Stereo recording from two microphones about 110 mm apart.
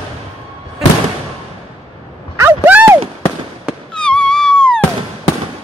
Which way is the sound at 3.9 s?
10° left (ahead or behind).